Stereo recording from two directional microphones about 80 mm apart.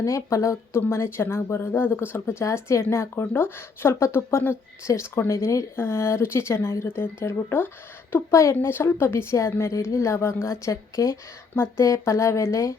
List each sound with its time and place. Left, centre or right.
0.0 s speech: left